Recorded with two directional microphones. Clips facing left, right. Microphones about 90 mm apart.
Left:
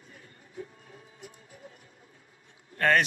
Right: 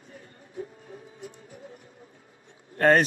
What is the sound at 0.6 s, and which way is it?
Music, 30° right (ahead or behind).